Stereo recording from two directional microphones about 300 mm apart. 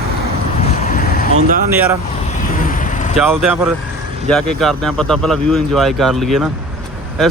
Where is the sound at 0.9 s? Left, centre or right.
Left.